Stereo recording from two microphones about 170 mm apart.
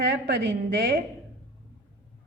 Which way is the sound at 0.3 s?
70° right (ahead or behind).